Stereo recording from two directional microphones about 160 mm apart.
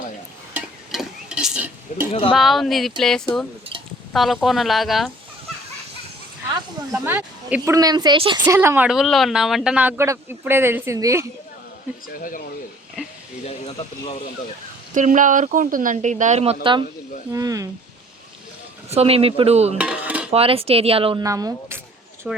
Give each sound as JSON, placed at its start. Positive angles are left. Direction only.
{"t": 0.5, "sound": "stir", "side_deg": -5}
{"t": 2.3, "sound": "speech", "side_deg": 0}
{"t": 6.5, "sound": "speech", "side_deg": -15}
{"t": 7.7, "sound": "a woman's voice", "side_deg": -25}
{"t": 8.4, "sound": "speech", "side_deg": -15}
{"t": 8.9, "sound": "speech", "side_deg": 0}
{"t": 12.0, "sound": "speech", "side_deg": 60}
{"t": 14.9, "sound": "speech", "side_deg": -55}
{"t": 17.3, "sound": "a woman's voice", "side_deg": -20}
{"t": 18.9, "sound": "speech", "side_deg": -40}
{"t": 19.8, "sound": "dishes", "side_deg": -10}
{"t": 20.3, "sound": "speech", "side_deg": -35}
{"t": 21.2, "sound": "a woman's voice", "side_deg": -20}
{"t": 22.3, "sound": "speech", "side_deg": -5}